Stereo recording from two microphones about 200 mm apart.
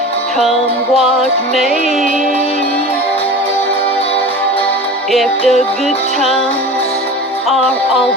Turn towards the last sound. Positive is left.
turn(degrees=0)  # may be behind; listen again after turning